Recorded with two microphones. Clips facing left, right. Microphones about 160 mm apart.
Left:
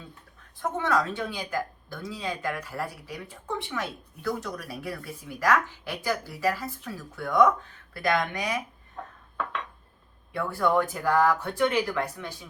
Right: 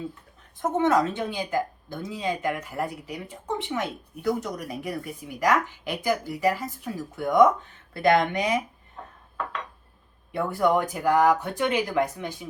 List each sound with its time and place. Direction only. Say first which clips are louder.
0.6 s speech: right 5 dB; 20° right (ahead or behind)
10.3 s speech: right 2 dB; 15° right (ahead or behind)